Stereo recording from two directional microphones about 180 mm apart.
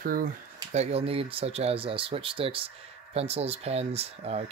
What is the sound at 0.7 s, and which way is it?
Speech, 35° right (ahead or behind).